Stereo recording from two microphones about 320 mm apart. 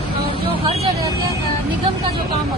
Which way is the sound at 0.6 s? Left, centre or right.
Centre.